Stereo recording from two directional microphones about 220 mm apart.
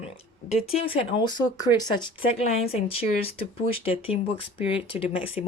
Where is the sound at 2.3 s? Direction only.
30° left (ahead or behind).